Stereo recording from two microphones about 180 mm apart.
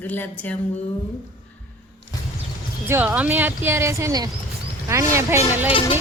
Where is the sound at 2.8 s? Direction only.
10° right (ahead or behind).